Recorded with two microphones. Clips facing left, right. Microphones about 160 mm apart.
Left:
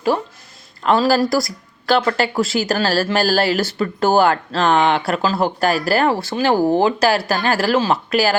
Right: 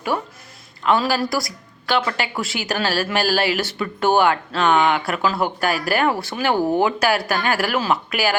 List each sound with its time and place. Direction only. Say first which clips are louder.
0.9 s speech: left 4 dB; 35° left (ahead or behind)